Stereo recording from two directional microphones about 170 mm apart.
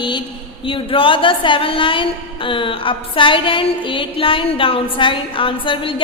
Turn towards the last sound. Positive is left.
turn(degrees=30)  # may be behind; listen again after turning